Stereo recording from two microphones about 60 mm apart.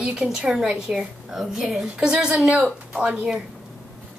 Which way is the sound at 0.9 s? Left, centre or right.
Centre.